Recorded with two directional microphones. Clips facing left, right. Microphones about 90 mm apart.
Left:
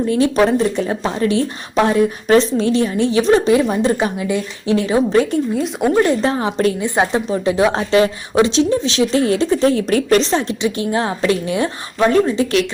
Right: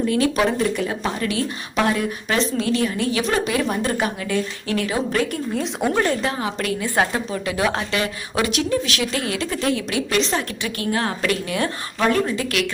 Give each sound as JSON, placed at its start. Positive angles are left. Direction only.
{"t": 0.1, "sound": "a woman's voice", "side_deg": 30}
{"t": 5.8, "sound": "speech", "side_deg": 15}
{"t": 6.2, "sound": "a woman's voice", "side_deg": 30}
{"t": 10.6, "sound": "a woman's voice", "side_deg": 20}